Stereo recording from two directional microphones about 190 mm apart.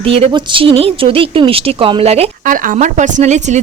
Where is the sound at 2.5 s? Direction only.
45° right (ahead or behind).